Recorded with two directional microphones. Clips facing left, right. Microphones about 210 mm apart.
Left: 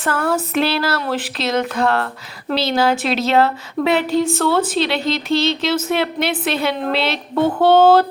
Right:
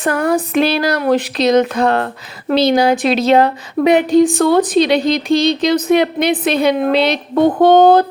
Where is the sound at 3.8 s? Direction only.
15° right (ahead or behind).